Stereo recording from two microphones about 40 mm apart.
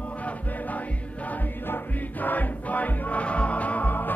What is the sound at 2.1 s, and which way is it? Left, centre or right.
Music, left.